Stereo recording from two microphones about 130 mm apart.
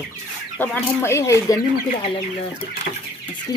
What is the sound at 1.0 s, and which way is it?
Speech, 20° left (ahead or behind).